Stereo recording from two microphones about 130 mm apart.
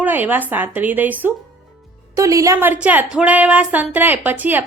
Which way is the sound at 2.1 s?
25° right (ahead or behind).